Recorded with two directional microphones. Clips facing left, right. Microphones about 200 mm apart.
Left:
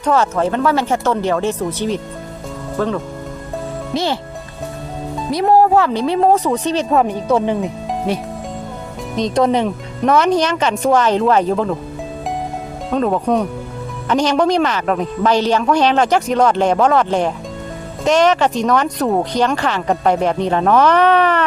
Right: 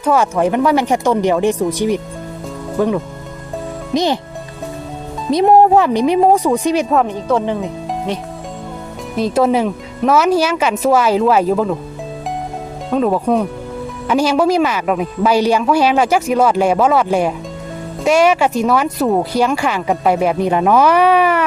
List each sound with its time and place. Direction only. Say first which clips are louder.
0.0 s speech: right 2 dB; 10° right (ahead or behind)
2.7 s speech: right 3 dB; 15° right (ahead or behind)
5.3 s speech: right 3 dB; 20° right (ahead or behind)
7.0 s speech: left 1 dB; 10° left (ahead or behind)
9.1 s speech: right 1 dB; 5° right (ahead or behind)
12.9 s speech: right 2 dB; 5° right (ahead or behind)